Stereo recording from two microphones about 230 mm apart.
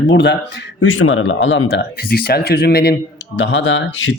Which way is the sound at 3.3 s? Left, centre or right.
Left.